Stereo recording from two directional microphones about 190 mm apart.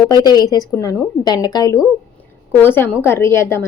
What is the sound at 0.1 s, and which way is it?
A woman's voice, 20° left (ahead or behind).